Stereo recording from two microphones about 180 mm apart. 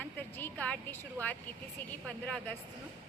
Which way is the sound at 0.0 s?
10° left (ahead or behind).